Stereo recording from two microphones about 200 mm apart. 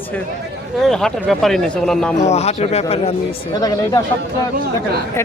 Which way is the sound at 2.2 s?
35° left (ahead or behind).